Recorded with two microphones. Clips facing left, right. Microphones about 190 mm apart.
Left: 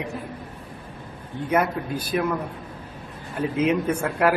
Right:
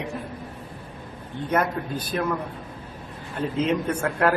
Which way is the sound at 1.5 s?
10° left (ahead or behind).